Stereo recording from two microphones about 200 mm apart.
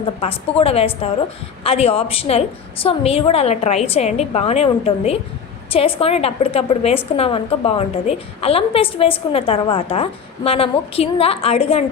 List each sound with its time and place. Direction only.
0.0 s a woman's voice: 30° left (ahead or behind)